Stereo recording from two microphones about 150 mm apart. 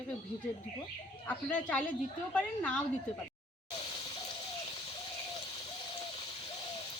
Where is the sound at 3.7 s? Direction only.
35° left (ahead or behind).